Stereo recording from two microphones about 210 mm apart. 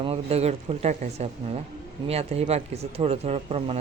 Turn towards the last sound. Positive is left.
turn(degrees=-30)  # may be behind; listen again after turning